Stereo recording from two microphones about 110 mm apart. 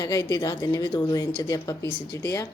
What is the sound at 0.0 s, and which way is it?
A woman's voice, 30° left (ahead or behind).